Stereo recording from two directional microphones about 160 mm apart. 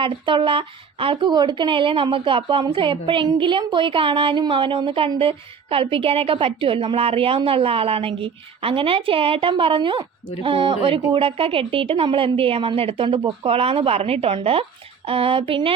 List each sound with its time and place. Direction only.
0.0 s speech: 30° right (ahead or behind)